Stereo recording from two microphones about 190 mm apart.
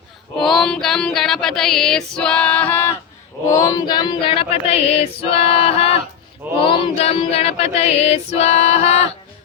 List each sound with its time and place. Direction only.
0.3 s music: centre (ahead or behind)
3.5 s child singing: 15° left (ahead or behind); by 9.0 s 35° left (ahead or behind)